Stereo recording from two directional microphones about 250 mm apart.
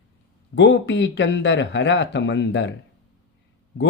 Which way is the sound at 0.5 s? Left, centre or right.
Left.